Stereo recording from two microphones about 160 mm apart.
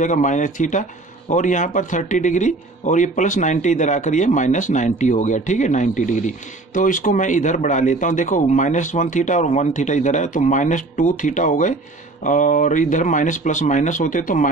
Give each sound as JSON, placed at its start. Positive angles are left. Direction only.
{"t": 0.0, "sound": "speech", "side_deg": 50}